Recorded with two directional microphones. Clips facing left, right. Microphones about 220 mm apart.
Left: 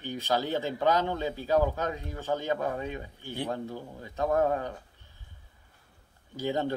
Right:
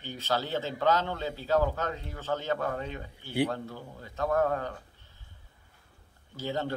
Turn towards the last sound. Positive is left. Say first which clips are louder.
# left 3 dB
turn(degrees=15)  # may be behind; listen again after turning